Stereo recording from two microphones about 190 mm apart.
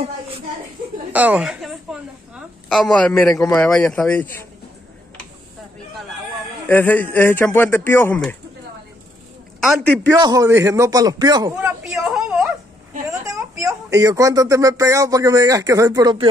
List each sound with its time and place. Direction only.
1.1 s a sound: 5° right (ahead or behind)
3.5 s a man's voice: 5° left (ahead or behind)
6.7 s a man's voice: 10° left (ahead or behind)
9.6 s a man's voice: centre (ahead or behind)
10.1 s a man's voice: 20° right (ahead or behind)
11.6 s a sound: centre (ahead or behind)
13.1 s speech: 15° right (ahead or behind)